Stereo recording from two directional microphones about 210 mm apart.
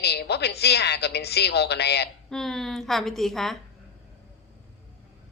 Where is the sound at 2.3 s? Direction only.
Centre (ahead or behind).